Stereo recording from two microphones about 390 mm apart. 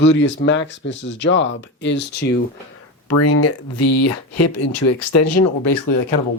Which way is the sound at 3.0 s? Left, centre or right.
Left.